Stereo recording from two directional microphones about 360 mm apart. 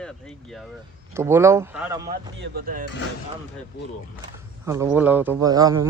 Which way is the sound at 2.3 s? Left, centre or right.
Right.